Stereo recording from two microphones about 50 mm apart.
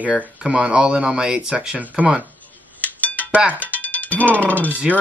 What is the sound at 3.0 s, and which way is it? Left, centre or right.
Dishes, left.